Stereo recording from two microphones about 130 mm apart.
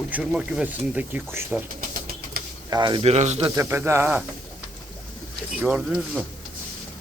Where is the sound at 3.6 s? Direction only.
20° right (ahead or behind).